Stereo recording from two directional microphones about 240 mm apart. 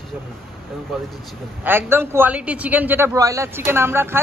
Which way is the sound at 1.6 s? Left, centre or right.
Centre.